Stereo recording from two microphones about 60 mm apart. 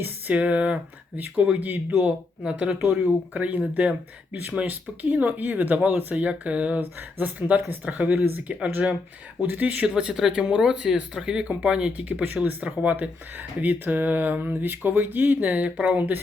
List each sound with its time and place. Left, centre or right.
0.3 s speech: right
9.8 s speech: centre